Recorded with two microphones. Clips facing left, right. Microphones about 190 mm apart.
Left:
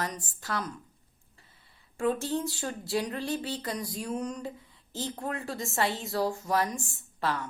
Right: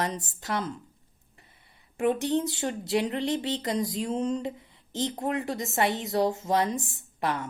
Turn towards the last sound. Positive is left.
turn(degrees=-20)  # may be behind; listen again after turning